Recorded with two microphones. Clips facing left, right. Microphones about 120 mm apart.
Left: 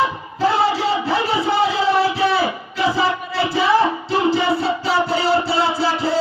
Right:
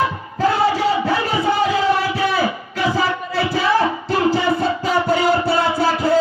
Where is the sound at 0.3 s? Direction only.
45° right (ahead or behind).